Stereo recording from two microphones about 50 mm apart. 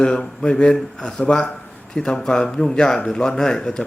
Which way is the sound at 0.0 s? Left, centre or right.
Centre.